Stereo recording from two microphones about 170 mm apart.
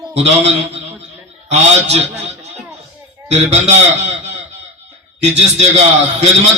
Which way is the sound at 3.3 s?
40° right (ahead or behind).